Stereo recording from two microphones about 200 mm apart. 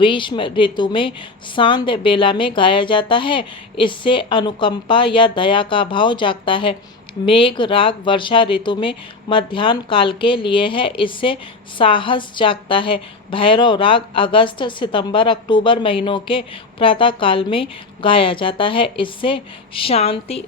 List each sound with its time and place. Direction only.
0.0 s a woman's voice: 25° left (ahead or behind)